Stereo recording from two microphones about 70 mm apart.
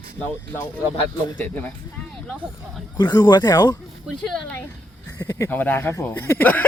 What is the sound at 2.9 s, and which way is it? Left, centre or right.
Speech, left.